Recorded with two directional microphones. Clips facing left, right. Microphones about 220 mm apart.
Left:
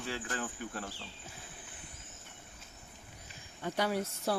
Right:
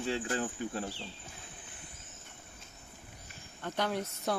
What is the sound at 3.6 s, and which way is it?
Speech, 10° left (ahead or behind).